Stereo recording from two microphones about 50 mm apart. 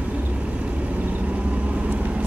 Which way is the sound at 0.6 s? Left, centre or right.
Right.